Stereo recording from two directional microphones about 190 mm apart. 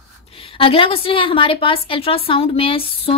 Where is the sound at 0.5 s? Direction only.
30° left (ahead or behind).